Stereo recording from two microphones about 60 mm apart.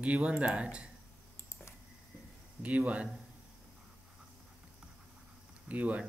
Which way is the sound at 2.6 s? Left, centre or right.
Right.